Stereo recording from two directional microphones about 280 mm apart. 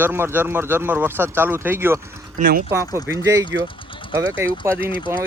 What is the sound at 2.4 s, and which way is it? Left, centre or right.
Speech, right.